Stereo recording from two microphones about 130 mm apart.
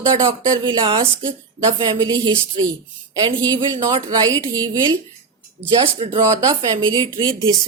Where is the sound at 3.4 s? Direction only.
30° right (ahead or behind).